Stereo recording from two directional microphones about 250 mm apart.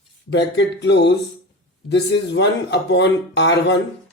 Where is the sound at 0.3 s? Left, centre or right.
Left.